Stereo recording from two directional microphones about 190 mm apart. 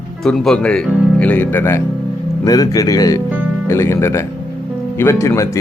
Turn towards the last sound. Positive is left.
turn(degrees=15)  # may be behind; listen again after turning